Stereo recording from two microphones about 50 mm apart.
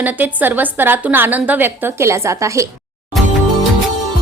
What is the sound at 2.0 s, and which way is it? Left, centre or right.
Speech, right.